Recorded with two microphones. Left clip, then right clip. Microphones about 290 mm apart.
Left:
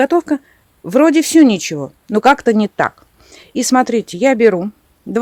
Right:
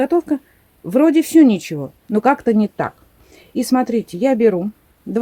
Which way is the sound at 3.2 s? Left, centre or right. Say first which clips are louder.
Left 3 dB; left.